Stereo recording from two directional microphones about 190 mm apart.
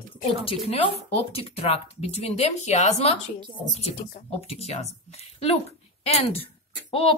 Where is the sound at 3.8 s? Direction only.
35° left (ahead or behind).